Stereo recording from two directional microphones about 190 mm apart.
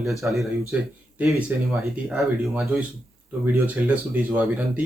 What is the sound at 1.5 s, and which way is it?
Speech, 10° right (ahead or behind).